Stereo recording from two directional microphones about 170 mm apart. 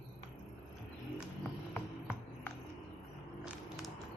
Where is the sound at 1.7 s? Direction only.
15° left (ahead or behind).